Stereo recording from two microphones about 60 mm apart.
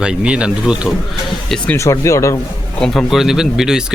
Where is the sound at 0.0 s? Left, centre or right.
Centre.